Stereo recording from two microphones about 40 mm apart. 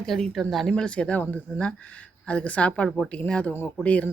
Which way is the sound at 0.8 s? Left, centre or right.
Left.